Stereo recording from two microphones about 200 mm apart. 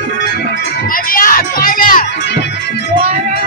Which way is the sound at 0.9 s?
45° left (ahead or behind).